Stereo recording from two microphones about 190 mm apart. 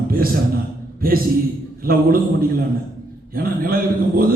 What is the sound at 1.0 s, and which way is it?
A man's voice, 50° right (ahead or behind).